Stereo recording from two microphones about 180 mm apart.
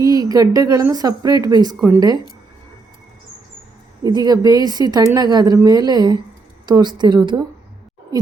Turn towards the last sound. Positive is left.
turn(degrees=-25)  # may be behind; listen again after turning